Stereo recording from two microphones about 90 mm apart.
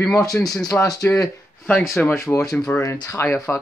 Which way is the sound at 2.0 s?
10° left (ahead or behind).